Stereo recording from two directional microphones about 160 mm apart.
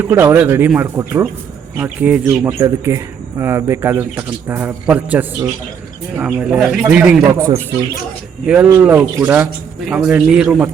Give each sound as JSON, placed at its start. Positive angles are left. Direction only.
{"t": 0.0, "sound": "speech", "side_deg": -15}
{"t": 8.4, "sound": "speech", "side_deg": -5}